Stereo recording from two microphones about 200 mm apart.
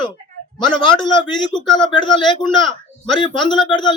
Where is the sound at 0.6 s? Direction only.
25° left (ahead or behind).